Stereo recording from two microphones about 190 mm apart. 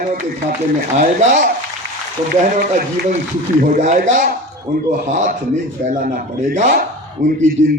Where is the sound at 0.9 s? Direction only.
40° right (ahead or behind).